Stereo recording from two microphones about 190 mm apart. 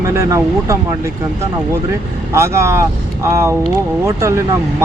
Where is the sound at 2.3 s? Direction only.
15° right (ahead or behind).